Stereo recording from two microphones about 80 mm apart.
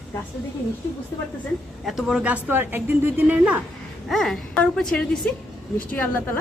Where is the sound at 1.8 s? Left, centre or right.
Centre.